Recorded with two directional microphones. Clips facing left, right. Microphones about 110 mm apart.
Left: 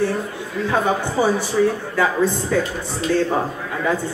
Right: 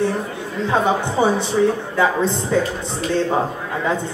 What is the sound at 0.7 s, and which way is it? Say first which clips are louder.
Speech: right 2 dB; 20° right (ahead or behind).